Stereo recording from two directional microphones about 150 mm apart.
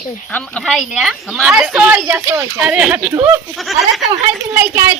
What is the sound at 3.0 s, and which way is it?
Speech, 20° right (ahead or behind).